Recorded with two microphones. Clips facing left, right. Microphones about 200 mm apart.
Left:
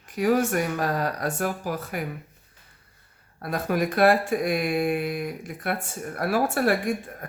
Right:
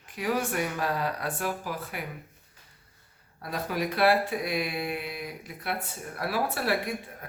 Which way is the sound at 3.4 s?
50° left (ahead or behind).